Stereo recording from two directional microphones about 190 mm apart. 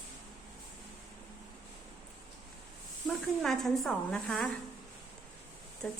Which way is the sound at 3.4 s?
Centre (ahead or behind).